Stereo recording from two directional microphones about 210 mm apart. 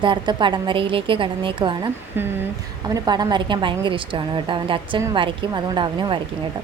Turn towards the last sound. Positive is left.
turn(degrees=-20)  # may be behind; listen again after turning